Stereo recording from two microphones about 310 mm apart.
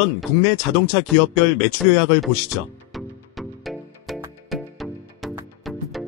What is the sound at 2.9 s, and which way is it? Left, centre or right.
Music, centre.